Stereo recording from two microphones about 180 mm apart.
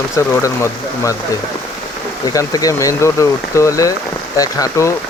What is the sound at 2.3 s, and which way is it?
Speech, 20° left (ahead or behind).